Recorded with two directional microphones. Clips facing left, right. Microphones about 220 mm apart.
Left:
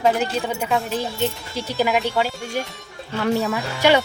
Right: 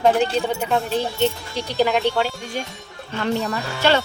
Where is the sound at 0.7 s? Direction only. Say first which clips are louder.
Even; centre (ahead or behind).